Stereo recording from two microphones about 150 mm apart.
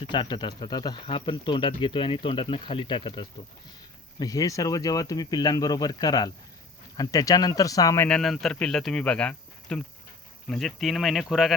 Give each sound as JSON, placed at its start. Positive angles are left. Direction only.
{"t": 0.0, "sound": "speech", "side_deg": 30}
{"t": 8.0, "sound": "speech", "side_deg": 5}